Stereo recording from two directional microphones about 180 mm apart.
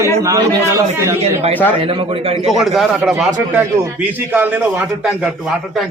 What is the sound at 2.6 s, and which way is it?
A man's voice, centre (ahead or behind).